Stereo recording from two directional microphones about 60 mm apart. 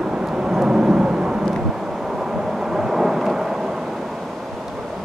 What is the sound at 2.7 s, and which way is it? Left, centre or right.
Thunder, centre.